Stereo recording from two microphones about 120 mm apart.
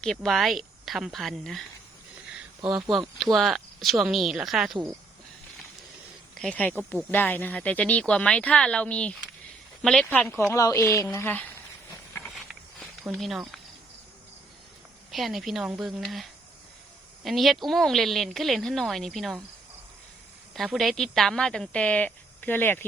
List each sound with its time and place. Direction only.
0.0 s a woman's voice: 5° left (ahead or behind)
3.3 s a woman's voice: centre (ahead or behind)
6.4 s a woman's voice: 10° left (ahead or behind)
10.1 s speech: 15° left (ahead or behind)
12.8 s speech: centre (ahead or behind)
15.1 s a woman's voice: centre (ahead or behind)
20.7 s speech: centre (ahead or behind)